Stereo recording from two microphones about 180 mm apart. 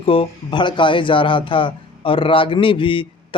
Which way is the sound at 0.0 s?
30° left (ahead or behind).